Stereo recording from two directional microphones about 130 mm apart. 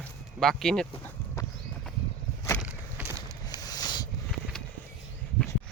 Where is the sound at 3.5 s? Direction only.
30° left (ahead or behind).